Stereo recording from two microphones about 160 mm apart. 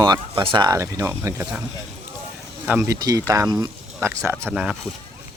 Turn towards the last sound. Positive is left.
turn(degrees=-5)  # may be behind; listen again after turning